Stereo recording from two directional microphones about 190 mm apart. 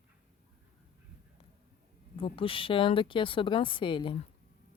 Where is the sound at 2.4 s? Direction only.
30° left (ahead or behind).